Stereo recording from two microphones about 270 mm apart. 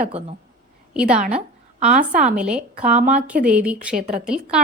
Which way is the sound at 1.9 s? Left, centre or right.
Right.